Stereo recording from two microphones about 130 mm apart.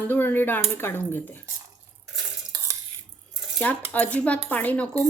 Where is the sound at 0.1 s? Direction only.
15° left (ahead or behind).